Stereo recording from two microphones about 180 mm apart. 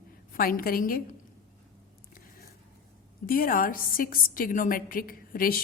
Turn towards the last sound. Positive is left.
turn(degrees=55)  # may be behind; listen again after turning